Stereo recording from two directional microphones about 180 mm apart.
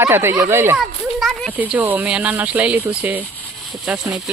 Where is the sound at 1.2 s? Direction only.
Centre (ahead or behind).